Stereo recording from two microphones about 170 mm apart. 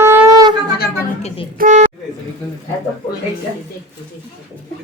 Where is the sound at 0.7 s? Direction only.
65° left (ahead or behind).